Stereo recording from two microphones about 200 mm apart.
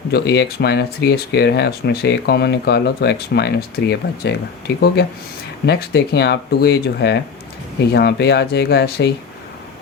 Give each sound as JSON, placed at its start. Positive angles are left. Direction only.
{"t": 0.1, "sound": "speech", "side_deg": 55}
{"t": 5.6, "sound": "speech", "side_deg": 55}